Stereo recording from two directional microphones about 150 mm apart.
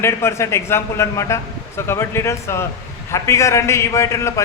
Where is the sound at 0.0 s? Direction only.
15° left (ahead or behind).